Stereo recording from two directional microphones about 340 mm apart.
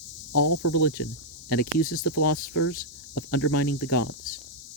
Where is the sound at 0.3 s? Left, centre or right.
Left.